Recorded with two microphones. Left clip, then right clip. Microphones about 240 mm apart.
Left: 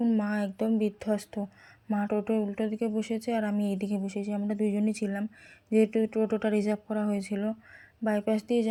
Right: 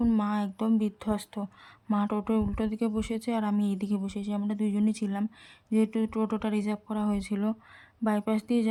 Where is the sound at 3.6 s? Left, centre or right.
Right.